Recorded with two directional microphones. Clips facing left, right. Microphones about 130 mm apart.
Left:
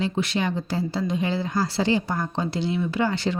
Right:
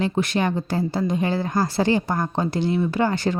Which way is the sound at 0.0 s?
50° right (ahead or behind).